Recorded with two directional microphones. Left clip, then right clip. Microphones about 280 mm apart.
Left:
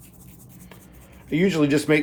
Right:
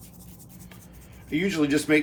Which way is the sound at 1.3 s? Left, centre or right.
Left.